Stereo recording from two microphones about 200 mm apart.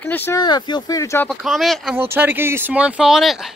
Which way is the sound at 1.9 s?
10° right (ahead or behind).